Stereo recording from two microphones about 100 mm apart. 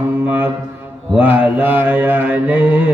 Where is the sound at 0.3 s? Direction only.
20° right (ahead or behind).